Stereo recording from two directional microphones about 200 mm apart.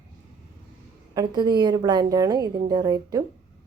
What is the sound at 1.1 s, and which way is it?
A woman's voice, 20° right (ahead or behind).